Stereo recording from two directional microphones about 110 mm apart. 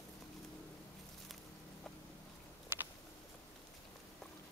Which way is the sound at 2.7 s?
20° right (ahead or behind).